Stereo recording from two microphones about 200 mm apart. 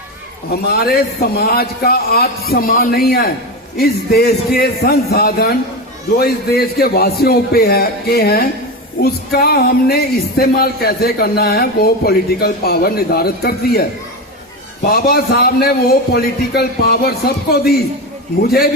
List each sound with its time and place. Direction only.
0.7 s speech: 50° left (ahead or behind)
14.8 s speech: 50° left (ahead or behind)